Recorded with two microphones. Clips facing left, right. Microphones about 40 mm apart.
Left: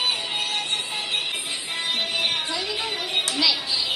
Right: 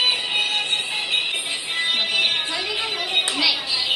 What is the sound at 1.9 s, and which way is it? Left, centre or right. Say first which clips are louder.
Music: right 3 dB; right.